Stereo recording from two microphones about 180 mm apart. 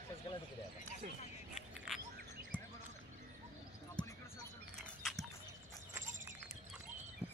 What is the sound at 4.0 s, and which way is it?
Basketball bounce, 5° left (ahead or behind).